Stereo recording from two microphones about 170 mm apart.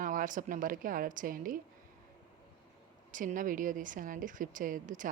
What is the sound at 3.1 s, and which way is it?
A woman's voice, 50° right (ahead or behind).